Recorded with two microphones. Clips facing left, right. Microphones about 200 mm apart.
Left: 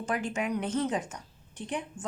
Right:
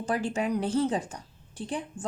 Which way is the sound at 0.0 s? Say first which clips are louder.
Right 3 dB; 35° right (ahead or behind).